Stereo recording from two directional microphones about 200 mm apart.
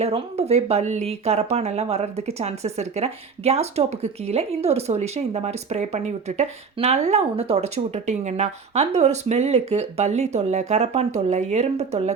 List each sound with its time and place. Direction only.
0.0 s speech: 30° right (ahead or behind)